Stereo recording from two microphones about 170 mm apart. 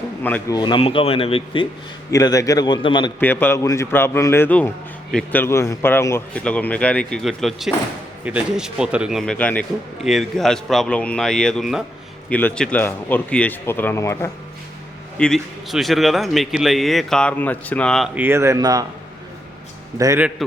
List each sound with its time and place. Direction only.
0.2 s speech: 10° left (ahead or behind)
0.5 s speech: 25° left (ahead or behind)
2.0 s a man's voice: 20° left (ahead or behind)
3.2 s speech: 10° left (ahead or behind)
15.2 s speech: centre (ahead or behind)
18.1 s a man's voice: 10° right (ahead or behind)
20.0 s a man's voice: 20° right (ahead or behind)